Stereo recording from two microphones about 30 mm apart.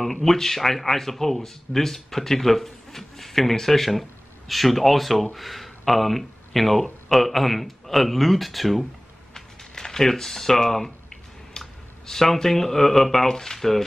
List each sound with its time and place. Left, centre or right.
0.0 s speech: centre
9.3 s a sound: centre
11.6 s clicking: centre
12.1 s speech: centre